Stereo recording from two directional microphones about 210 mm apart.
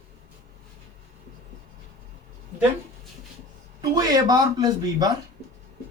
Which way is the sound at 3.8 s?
20° right (ahead or behind).